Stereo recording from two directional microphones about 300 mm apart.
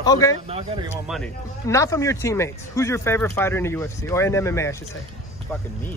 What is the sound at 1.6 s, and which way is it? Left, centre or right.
A man's voice, centre.